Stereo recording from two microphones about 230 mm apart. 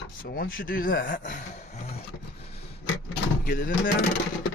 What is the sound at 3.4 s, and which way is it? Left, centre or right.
Speech, left.